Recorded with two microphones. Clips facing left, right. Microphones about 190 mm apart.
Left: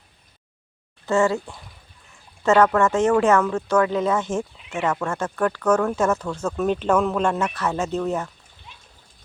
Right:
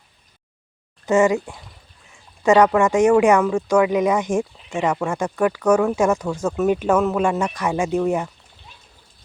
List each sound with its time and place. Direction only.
1.0 s speech: 15° right (ahead or behind)